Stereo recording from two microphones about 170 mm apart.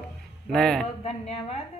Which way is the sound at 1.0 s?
35° left (ahead or behind).